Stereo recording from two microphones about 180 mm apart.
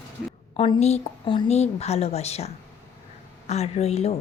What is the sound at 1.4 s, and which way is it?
A woman's voice, 35° left (ahead or behind).